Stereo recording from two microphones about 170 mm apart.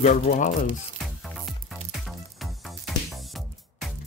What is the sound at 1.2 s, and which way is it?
Music, centre (ahead or behind).